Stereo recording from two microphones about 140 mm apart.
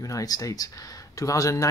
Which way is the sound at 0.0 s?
25° left (ahead or behind).